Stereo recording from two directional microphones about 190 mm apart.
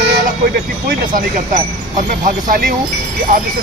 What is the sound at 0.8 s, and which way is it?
Speech, 45° right (ahead or behind).